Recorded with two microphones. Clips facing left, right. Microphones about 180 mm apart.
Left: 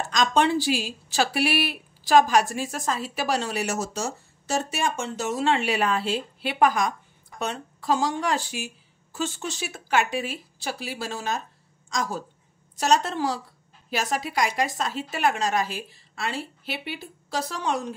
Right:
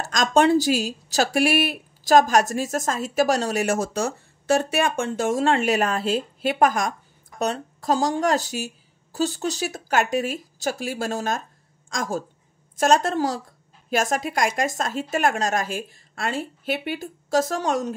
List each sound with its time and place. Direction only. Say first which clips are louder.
0.1 s speech: right 4 dB; 45° right (ahead or behind)